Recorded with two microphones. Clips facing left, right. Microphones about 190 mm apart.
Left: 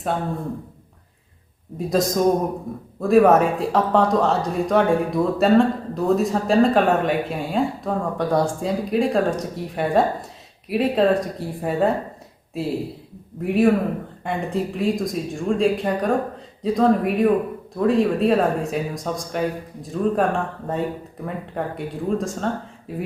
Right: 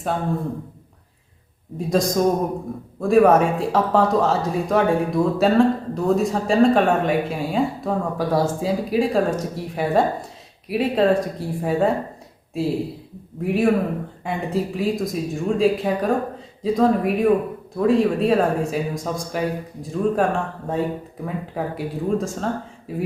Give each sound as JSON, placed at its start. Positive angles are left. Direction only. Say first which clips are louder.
{"t": 1.9, "sound": "speech", "louder": "even", "side_deg": 0}